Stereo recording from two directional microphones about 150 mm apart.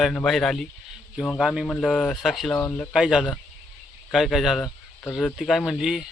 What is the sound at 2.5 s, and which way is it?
Speech, 10° left (ahead or behind).